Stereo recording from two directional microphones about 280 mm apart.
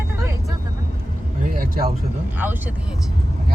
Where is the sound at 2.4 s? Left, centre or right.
Centre.